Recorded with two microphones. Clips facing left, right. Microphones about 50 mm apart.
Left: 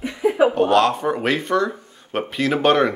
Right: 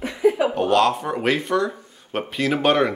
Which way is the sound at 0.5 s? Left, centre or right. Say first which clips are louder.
Left 2 dB; centre.